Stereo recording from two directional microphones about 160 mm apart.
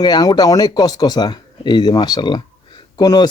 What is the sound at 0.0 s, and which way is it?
Speech, 25° left (ahead or behind).